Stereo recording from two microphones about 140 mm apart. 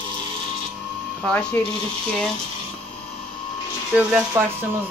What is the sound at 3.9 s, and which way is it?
Speech, 5° right (ahead or behind).